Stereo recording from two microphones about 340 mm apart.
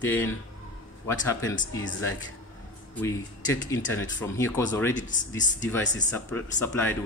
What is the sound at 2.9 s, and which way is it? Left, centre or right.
A man's voice, centre.